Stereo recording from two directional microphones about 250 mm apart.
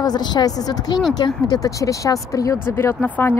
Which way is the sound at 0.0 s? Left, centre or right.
Centre.